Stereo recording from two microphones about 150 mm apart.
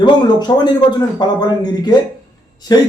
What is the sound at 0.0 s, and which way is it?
Speech, 30° left (ahead or behind).